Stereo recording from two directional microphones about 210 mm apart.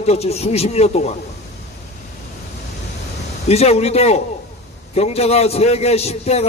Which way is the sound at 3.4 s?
30° left (ahead or behind).